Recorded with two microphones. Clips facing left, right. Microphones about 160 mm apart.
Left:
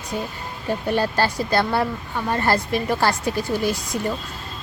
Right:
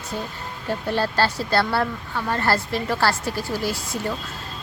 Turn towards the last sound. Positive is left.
turn(degrees=15)  # may be behind; listen again after turning